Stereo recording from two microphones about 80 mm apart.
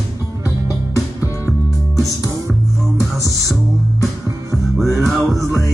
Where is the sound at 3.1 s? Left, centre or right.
Right.